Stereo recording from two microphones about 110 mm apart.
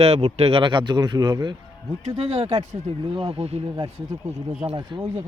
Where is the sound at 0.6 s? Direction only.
50° right (ahead or behind).